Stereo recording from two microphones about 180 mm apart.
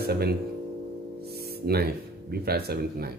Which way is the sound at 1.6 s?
60° right (ahead or behind).